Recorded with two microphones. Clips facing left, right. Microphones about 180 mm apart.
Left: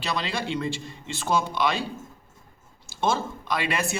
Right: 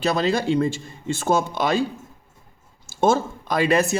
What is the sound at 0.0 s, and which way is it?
Speech, 45° right (ahead or behind).